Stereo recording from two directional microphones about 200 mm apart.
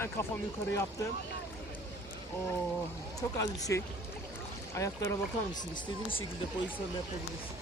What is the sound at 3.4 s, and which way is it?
Speech, 15° left (ahead or behind).